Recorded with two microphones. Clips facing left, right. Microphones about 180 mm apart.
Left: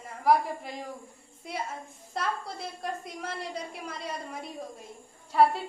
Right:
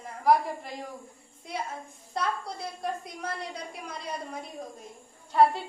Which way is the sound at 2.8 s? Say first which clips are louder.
Right 2 dB; centre (ahead or behind).